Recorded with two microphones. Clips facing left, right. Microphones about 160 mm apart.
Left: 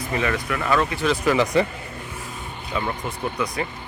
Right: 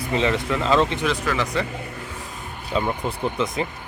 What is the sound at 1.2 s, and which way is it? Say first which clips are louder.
Speech: left 5 dB; 15° left (ahead or behind).